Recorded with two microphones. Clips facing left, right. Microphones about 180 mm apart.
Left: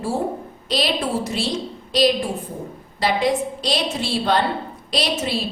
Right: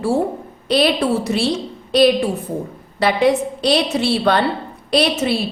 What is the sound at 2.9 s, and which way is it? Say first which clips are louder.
A woman's voice: right 4 dB; 65° right (ahead or behind).